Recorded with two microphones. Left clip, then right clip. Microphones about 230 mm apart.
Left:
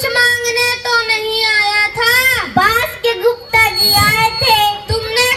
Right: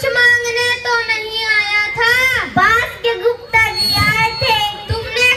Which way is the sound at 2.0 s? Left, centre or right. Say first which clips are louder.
Even; left.